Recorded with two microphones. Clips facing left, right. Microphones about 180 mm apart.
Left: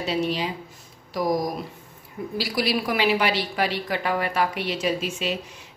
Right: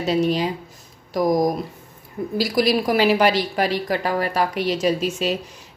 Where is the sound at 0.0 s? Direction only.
45° right (ahead or behind).